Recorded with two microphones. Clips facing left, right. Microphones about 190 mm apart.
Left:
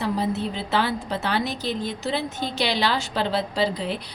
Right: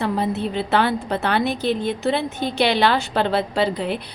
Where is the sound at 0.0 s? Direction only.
60° right (ahead or behind).